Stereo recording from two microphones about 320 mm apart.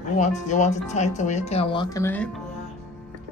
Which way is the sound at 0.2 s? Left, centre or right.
Left.